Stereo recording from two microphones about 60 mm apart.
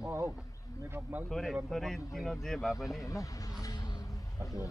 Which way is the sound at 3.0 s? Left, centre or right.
Left.